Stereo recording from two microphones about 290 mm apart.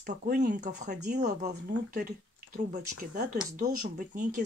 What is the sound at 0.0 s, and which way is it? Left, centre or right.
Speech, right.